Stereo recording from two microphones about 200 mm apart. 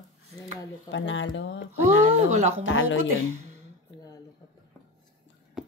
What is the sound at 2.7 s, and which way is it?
Speech, 70° left (ahead or behind).